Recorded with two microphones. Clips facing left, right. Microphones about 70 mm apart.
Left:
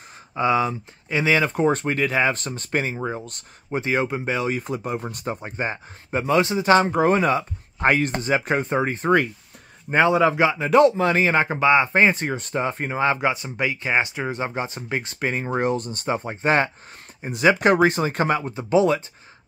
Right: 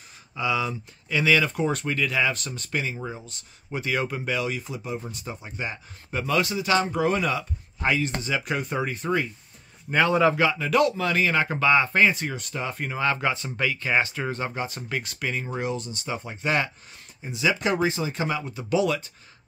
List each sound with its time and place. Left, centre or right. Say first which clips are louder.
0.4 s speech: left 6 dB; left
3.2 s speech: left 7 dB; left
3.7 s speech: left 4 dB; left
8.4 s speech: left 4 dB; left
9.8 s a man's voice: left 3 dB; left
17.2 s speech: left 7 dB; left
18.5 s speech: left 4 dB; left